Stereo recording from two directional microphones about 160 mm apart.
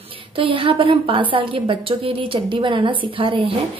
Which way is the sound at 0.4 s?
35° right (ahead or behind).